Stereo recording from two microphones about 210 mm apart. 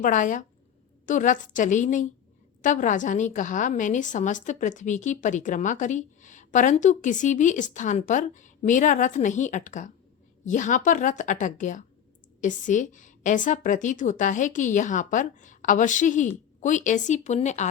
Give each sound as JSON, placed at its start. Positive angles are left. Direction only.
{"t": 0.0, "sound": "a woman's voice", "side_deg": 40}